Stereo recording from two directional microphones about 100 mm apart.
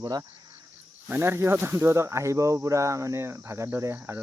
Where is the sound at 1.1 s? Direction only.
25° right (ahead or behind).